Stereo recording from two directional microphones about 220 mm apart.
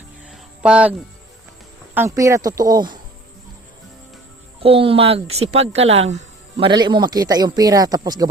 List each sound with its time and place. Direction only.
0.3 s cricket: 5° right (ahead or behind)
2.0 s speech: 15° right (ahead or behind)
4.6 s speech: 25° right (ahead or behind)